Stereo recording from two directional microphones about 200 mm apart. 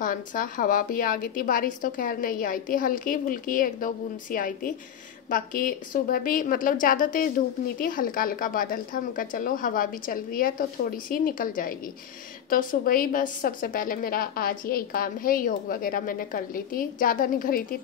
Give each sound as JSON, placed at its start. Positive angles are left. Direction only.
{"t": 0.0, "sound": "a woman's voice", "side_deg": 40}